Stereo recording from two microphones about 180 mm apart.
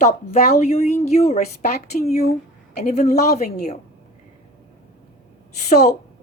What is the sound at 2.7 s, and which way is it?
Speech, 40° left (ahead or behind).